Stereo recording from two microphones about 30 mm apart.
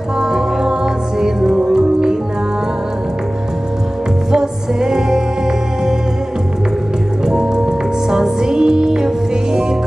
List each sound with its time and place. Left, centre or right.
0.2 s music: right
4.3 s music: right
7.2 s music: right